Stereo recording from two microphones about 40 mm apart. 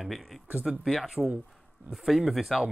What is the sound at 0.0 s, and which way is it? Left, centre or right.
Speech, centre.